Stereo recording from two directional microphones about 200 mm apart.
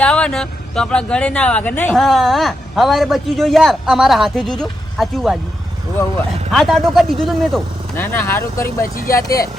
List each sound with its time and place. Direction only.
0.0 s speech: 5° left (ahead or behind)
6.5 s speech: centre (ahead or behind); by 9.4 s 15° left (ahead or behind)